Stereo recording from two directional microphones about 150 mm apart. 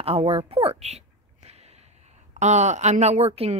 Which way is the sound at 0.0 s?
40° right (ahead or behind).